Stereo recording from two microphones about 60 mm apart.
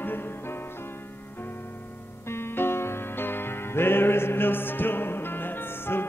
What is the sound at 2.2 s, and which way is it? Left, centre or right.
Music, left.